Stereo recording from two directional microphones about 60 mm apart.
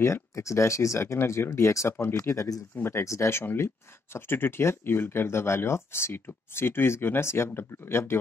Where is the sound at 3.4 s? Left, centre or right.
Left.